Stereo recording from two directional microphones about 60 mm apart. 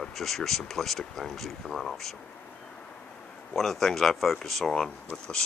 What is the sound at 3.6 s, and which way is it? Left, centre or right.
Speech, centre.